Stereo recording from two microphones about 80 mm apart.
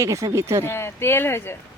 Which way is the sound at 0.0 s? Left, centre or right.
Right.